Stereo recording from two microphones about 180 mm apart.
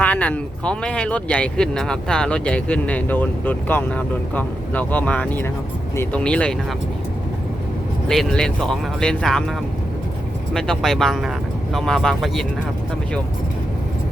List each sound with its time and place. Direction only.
0.0 s speech: 10° left (ahead or behind)
8.0 s speech: 5° left (ahead or behind)